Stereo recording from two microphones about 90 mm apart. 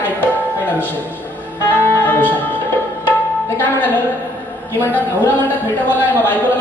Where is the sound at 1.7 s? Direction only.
25° left (ahead or behind).